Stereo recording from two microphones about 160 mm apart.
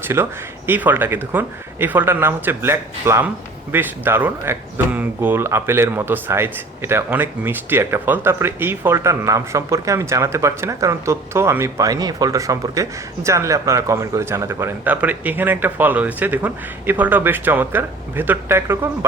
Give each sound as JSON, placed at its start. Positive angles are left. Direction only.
{"t": 0.0, "sound": "speech", "side_deg": -15}